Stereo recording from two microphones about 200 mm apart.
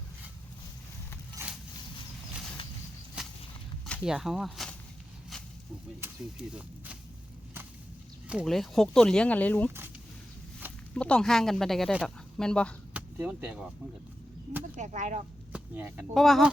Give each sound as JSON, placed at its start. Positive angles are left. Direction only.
{"t": 1.4, "sound": "a sound", "side_deg": -10}
{"t": 3.2, "sound": "a sound", "side_deg": -5}
{"t": 3.8, "sound": "speech", "side_deg": 0}
{"t": 6.5, "sound": "speech", "side_deg": -5}
{"t": 8.3, "sound": "speech", "side_deg": 0}
{"t": 10.9, "sound": "speech", "side_deg": 5}
{"t": 12.9, "sound": "a sound", "side_deg": -5}
{"t": 14.8, "sound": "speech", "side_deg": -35}
{"t": 15.5, "sound": "speech", "side_deg": -10}